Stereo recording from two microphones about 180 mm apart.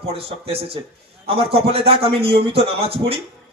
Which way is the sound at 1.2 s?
30° right (ahead or behind).